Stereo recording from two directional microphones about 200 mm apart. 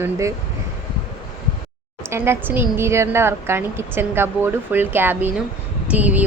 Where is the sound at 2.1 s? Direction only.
10° right (ahead or behind).